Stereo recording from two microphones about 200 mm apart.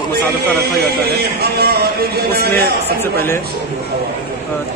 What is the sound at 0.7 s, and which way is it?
A man's voice, 55° right (ahead or behind).